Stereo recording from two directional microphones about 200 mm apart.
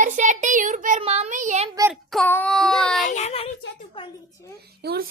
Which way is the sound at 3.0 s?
35° left (ahead or behind).